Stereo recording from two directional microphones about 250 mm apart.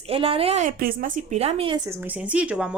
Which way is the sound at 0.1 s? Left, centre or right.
Right.